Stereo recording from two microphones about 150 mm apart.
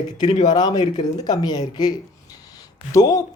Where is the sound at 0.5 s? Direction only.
25° left (ahead or behind).